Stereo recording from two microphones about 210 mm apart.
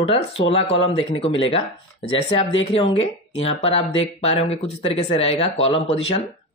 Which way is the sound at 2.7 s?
25° left (ahead or behind).